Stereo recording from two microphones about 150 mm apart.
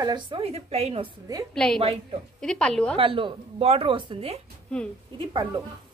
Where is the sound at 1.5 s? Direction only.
5° left (ahead or behind).